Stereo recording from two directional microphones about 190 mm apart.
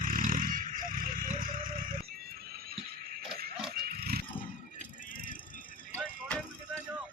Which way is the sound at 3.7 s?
55° right (ahead or behind).